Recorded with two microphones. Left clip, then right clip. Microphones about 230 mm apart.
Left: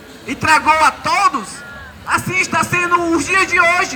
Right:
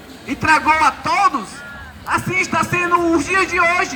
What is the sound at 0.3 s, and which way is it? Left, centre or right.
A man's voice, left.